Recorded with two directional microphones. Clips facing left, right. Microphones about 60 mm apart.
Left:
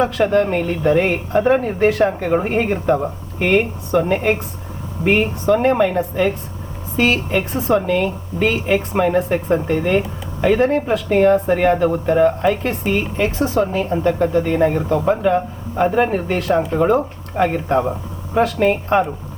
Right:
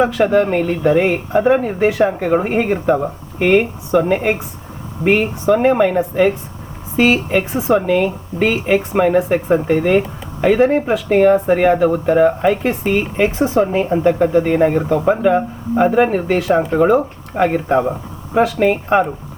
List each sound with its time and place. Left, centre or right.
0.0 s speech: centre
15.9 s speech: centre